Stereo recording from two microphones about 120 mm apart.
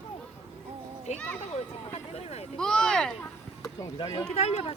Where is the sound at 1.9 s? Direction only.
60° left (ahead or behind).